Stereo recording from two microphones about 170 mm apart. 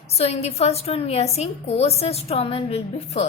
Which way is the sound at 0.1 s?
40° left (ahead or behind).